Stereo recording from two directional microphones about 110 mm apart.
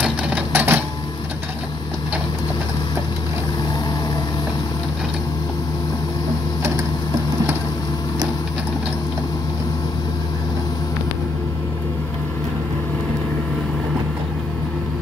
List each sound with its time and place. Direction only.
0.0 s typewriter: 15° right (ahead or behind)